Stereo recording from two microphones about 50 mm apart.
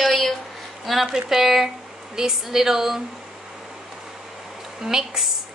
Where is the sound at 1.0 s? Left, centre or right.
Centre.